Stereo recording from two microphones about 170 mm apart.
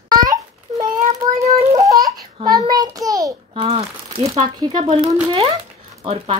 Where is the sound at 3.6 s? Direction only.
35° right (ahead or behind).